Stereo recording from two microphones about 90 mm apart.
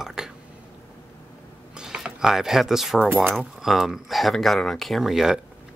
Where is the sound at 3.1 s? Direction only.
25° right (ahead or behind).